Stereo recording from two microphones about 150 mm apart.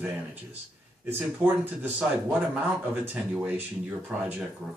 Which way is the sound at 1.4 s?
15° right (ahead or behind).